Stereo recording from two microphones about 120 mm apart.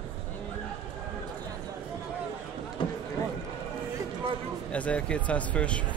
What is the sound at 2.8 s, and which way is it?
Run, 45° left (ahead or behind).